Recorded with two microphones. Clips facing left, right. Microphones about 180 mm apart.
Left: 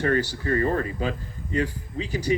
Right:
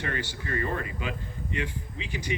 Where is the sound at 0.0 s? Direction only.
40° left (ahead or behind).